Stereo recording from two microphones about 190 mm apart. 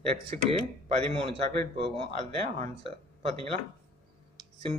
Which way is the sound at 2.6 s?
40° right (ahead or behind).